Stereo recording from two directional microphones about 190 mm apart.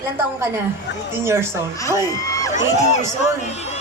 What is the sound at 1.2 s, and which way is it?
Speech, 15° right (ahead or behind).